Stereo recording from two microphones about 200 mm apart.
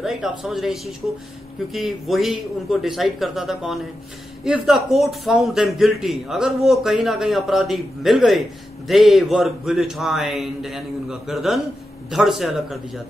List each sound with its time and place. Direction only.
0.0 s speech: centre (ahead or behind)